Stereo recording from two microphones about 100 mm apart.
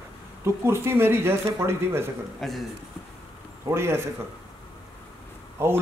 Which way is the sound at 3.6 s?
25° right (ahead or behind).